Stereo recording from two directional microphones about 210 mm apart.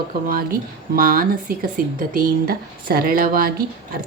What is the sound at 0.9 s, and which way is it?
Speech, 45° right (ahead or behind).